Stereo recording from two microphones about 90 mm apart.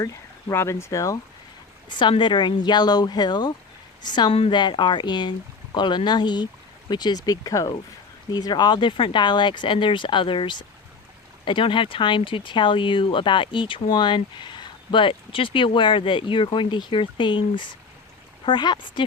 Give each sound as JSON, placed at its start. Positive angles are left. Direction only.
{"t": 0.0, "sound": "speech", "side_deg": 30}
{"t": 1.9, "sound": "a woman's voice", "side_deg": 60}
{"t": 4.3, "sound": "speech", "side_deg": 90}